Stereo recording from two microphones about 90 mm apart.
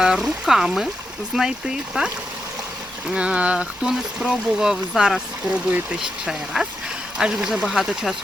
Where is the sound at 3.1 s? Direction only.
15° right (ahead or behind).